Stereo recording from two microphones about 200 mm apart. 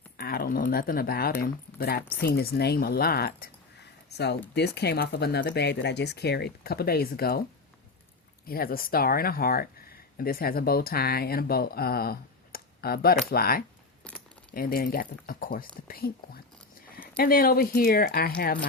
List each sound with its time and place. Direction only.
0.2 s speech: 50° left (ahead or behind)
8.4 s speech: 45° left (ahead or behind)